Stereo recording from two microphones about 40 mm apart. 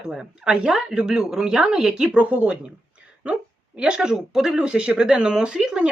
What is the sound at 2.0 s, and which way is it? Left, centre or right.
Speech, right.